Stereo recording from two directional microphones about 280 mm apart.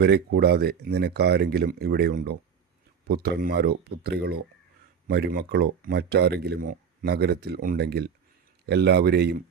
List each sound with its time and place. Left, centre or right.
0.0 s speech: right